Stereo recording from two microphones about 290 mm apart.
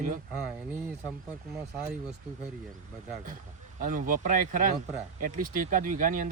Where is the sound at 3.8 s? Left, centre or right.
Right.